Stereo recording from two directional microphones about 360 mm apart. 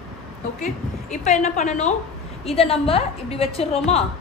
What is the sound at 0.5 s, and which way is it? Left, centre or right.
A woman's voice, centre.